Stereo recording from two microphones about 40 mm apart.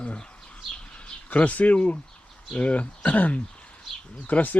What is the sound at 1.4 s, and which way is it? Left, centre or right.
Speech, left.